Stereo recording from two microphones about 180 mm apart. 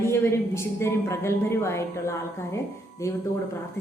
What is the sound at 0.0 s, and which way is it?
A woman's voice, 15° left (ahead or behind).